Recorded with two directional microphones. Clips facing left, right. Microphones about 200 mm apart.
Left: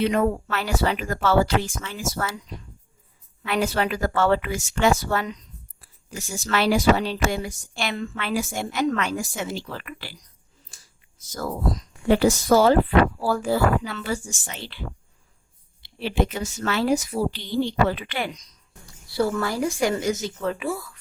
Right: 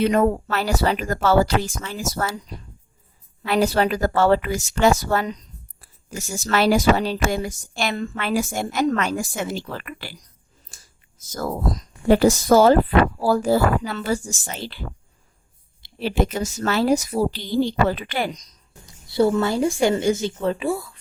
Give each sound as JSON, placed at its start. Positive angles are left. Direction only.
{"t": 0.0, "sound": "speech", "side_deg": -45}
{"t": 10.7, "sound": "finger snapping", "side_deg": -50}
{"t": 11.3, "sound": "speech", "side_deg": -45}
{"t": 18.9, "sound": "speech", "side_deg": -20}